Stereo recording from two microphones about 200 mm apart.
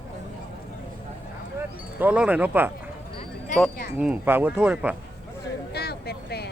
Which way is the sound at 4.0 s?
10° right (ahead or behind).